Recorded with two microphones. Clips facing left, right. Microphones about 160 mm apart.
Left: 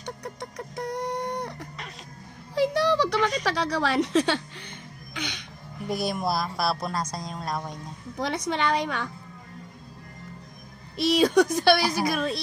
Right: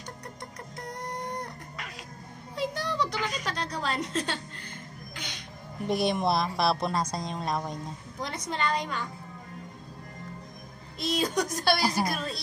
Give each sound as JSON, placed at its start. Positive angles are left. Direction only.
{"t": 0.0, "sound": "a sound", "side_deg": 70}
{"t": 2.5, "sound": "speech", "side_deg": 80}
{"t": 5.9, "sound": "speech", "side_deg": 5}
{"t": 8.2, "sound": "a woman's voice", "side_deg": 75}
{"t": 11.0, "sound": "a woman's voice", "side_deg": 70}